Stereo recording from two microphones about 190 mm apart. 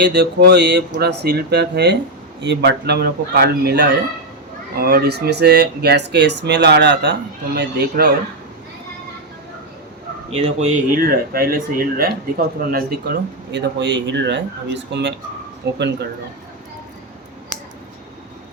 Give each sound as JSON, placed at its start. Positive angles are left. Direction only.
{"t": 0.0, "sound": "speech", "side_deg": -60}
{"t": 10.2, "sound": "speech", "side_deg": -35}